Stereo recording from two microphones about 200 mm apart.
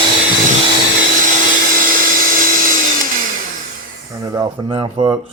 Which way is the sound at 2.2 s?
45° right (ahead or behind).